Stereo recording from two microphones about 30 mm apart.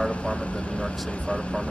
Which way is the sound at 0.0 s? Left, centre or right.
Left.